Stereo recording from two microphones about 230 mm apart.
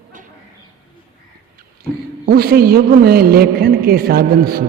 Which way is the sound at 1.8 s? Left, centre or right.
Right.